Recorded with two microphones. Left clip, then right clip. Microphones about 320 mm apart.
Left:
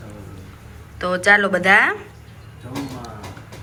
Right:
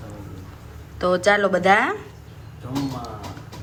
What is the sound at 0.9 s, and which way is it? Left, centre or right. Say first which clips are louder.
A woman's voice: left 3 dB; centre.